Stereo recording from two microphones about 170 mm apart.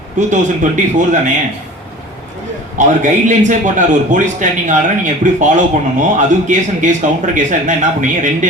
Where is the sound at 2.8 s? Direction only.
45° right (ahead or behind).